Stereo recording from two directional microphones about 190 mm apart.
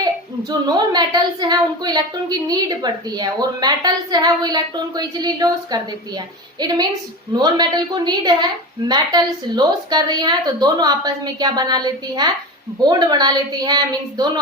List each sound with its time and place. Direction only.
0.9 s a woman's voice: 20° right (ahead or behind)